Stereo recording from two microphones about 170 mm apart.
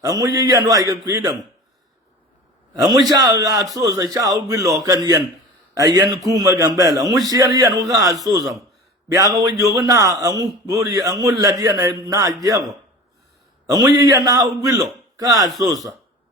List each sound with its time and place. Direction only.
0.0 s a man's voice: 20° right (ahead or behind)
2.9 s a man's voice: 25° right (ahead or behind)
13.7 s a man's voice: 20° right (ahead or behind)